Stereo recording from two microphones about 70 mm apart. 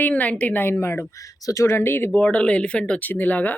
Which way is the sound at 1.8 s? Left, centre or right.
Left.